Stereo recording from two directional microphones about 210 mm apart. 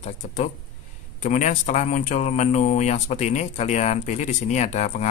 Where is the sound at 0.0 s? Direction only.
30° left (ahead or behind).